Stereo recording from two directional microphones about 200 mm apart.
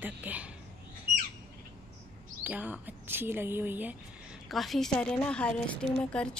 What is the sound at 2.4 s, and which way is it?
A woman's voice, 10° right (ahead or behind).